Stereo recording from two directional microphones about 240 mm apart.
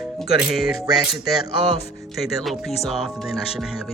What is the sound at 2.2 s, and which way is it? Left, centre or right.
Music, centre.